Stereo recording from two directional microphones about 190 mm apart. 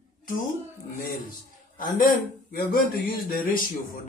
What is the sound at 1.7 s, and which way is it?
Speech, 50° left (ahead or behind).